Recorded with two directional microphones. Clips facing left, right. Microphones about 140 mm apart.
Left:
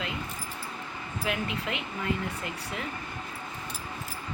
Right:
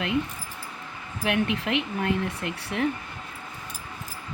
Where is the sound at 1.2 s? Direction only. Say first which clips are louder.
Right 6 dB; 80° right.